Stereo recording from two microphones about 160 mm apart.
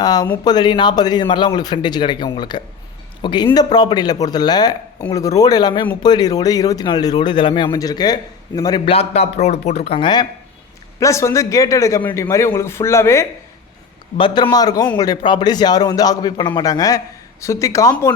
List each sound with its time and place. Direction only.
0.0 s speech: 25° left (ahead or behind)
8.8 s speech: 40° left (ahead or behind)
11.0 s a man's voice: 20° left (ahead or behind)
14.2 s speech: 30° left (ahead or behind)